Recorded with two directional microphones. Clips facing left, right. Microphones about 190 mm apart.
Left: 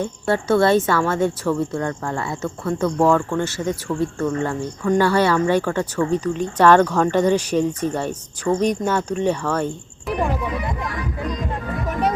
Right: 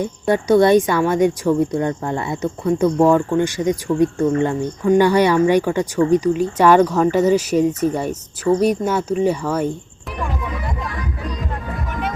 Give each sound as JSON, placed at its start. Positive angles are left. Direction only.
{"t": 0.0, "sound": "speech", "side_deg": -15}